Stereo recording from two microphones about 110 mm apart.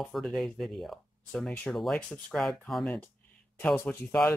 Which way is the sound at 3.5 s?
20° left (ahead or behind).